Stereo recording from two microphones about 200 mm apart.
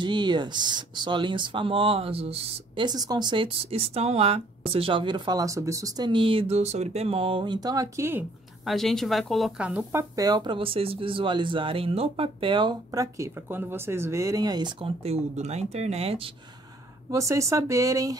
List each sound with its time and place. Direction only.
0.0 s speech: 20° right (ahead or behind)
8.6 s speech: centre (ahead or behind)
10.1 s speech: 20° right (ahead or behind)
17.1 s speech: 15° right (ahead or behind)